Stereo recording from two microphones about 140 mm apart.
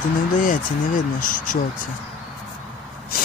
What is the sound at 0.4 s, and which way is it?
Speech, 70° left (ahead or behind).